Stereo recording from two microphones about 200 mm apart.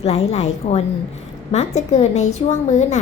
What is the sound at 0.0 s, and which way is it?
A woman's voice, 30° left (ahead or behind).